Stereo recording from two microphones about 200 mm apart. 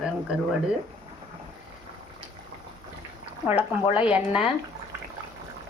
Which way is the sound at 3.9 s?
5° right (ahead or behind).